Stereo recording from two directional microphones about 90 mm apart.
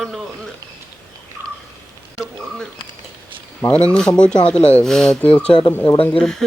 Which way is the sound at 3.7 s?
10° left (ahead or behind).